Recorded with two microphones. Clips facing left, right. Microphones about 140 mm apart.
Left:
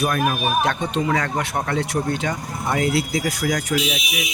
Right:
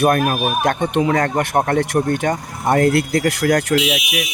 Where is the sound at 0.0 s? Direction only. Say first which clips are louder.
Right 5 dB; 55° right (ahead or behind).